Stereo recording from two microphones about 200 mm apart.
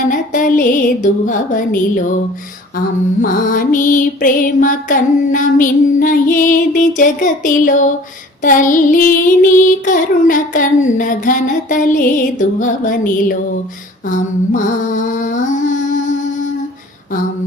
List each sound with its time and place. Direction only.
0.1 s mantra: 40° left (ahead or behind)
14.1 s music: 40° left (ahead or behind)